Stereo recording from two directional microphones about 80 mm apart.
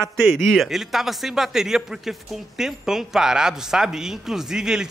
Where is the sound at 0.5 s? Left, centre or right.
Centre.